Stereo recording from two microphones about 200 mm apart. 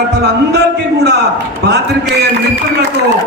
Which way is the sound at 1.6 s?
55° right (ahead or behind).